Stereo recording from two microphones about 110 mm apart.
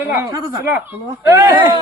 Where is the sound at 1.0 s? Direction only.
35° right (ahead or behind).